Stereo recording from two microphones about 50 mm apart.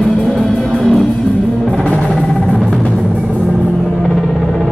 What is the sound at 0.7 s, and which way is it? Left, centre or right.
Music, centre.